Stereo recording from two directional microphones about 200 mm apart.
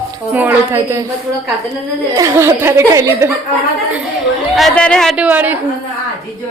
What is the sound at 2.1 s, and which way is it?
Speech, 15° right (ahead or behind).